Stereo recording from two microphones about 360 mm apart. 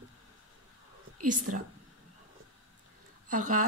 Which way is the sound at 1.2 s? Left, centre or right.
Right.